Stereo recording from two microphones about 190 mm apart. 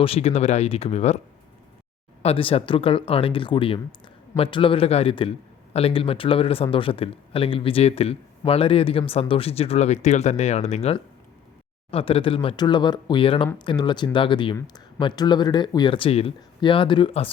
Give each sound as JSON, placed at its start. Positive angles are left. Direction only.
{"t": 0.0, "sound": "speech", "side_deg": 30}
{"t": 2.2, "sound": "speech", "side_deg": 30}